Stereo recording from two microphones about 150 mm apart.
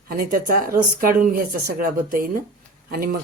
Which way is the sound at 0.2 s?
70° right (ahead or behind).